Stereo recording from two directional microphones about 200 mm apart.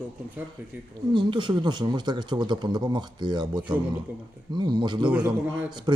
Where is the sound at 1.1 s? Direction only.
25° right (ahead or behind).